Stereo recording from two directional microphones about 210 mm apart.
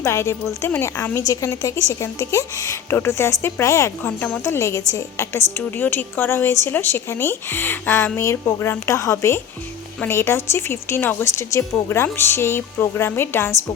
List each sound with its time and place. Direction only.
0.0 s a woman's voice: 15° left (ahead or behind)